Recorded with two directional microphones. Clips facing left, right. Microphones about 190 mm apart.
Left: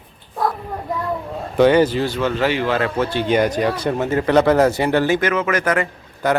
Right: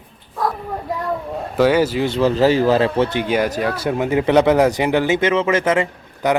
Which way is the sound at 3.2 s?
5° right (ahead or behind).